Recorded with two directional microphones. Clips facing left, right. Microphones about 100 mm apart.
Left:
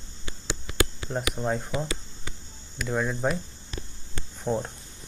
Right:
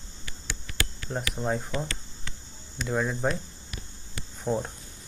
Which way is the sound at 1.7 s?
15° left (ahead or behind).